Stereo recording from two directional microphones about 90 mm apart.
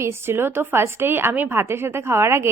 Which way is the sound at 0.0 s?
30° right (ahead or behind).